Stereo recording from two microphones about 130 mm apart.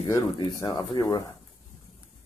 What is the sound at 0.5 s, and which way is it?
Speech, 30° left (ahead or behind).